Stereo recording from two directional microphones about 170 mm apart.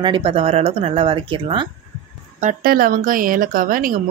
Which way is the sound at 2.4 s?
60° right (ahead or behind).